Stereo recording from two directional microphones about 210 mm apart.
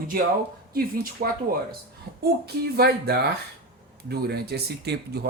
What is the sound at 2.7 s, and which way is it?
Speech, 50° right (ahead or behind).